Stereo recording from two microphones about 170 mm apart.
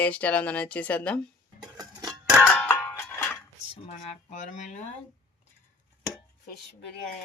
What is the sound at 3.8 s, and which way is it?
Speech, 45° left (ahead or behind).